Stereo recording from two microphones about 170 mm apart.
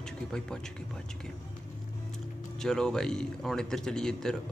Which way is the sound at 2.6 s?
5° left (ahead or behind).